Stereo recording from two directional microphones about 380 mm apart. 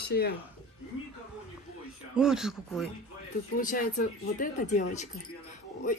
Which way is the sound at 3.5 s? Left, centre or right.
Left.